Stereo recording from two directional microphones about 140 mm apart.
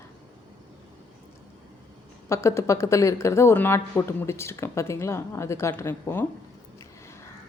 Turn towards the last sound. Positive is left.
turn(degrees=20)  # may be behind; listen again after turning